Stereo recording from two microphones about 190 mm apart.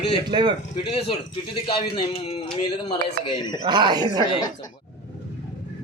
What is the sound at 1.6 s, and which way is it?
A man's voice, 25° left (ahead or behind).